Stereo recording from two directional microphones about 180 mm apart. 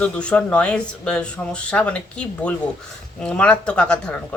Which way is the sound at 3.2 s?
5° left (ahead or behind).